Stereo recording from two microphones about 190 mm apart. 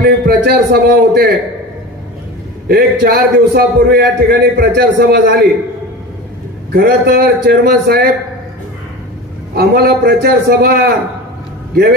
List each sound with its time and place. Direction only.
0.0 s a man's voice: 55° right (ahead or behind)
2.7 s a man's voice: 55° right (ahead or behind)
6.7 s a man's voice: 55° right (ahead or behind)
9.5 s a man's voice: 55° right (ahead or behind)